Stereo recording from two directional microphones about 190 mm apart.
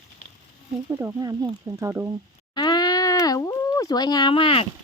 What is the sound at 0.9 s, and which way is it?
Speech, 15° right (ahead or behind).